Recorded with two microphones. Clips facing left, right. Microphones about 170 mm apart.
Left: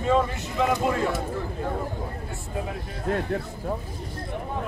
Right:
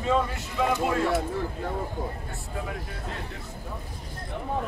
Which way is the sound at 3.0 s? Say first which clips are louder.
Left 11 dB; 55° left (ahead or behind).